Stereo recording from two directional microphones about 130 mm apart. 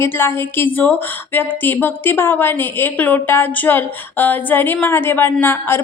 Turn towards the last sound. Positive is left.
turn(degrees=15)  # may be behind; listen again after turning